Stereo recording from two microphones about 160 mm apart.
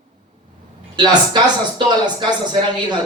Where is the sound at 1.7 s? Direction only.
30° right (ahead or behind).